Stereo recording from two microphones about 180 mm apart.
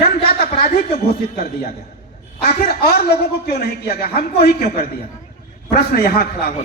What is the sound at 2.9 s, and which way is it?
A man's voice, 60° left (ahead or behind).